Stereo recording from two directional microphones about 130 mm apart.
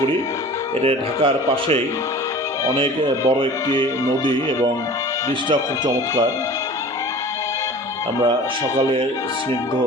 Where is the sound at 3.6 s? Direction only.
25° left (ahead or behind).